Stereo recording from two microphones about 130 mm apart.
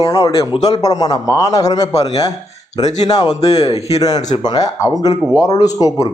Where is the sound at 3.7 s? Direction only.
55° left (ahead or behind).